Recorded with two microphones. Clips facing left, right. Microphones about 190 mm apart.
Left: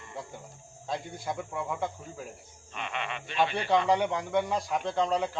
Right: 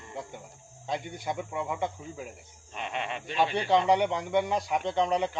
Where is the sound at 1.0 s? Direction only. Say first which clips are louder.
Right 1 dB; centre (ahead or behind).